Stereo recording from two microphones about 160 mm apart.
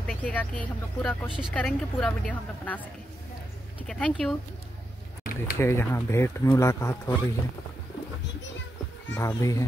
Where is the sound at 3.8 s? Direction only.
5° left (ahead or behind).